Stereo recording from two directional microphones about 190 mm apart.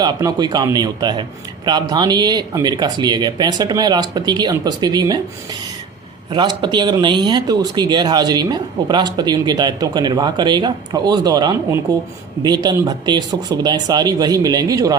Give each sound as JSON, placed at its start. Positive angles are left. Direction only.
{"t": 0.0, "sound": "speech", "side_deg": -20}
{"t": 6.3, "sound": "speech", "side_deg": -25}